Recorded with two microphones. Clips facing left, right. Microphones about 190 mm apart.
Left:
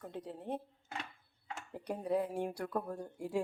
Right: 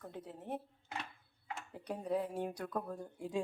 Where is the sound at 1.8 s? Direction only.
10° left (ahead or behind).